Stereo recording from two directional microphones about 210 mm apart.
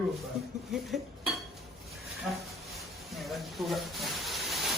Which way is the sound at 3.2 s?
Centre (ahead or behind).